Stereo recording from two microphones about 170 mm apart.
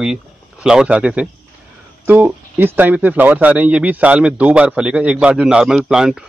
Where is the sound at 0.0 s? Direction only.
5° right (ahead or behind).